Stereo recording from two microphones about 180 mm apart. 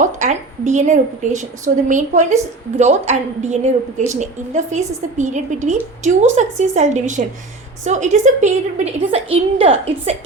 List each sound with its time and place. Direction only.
0.0 s a woman's voice: 40° right (ahead or behind)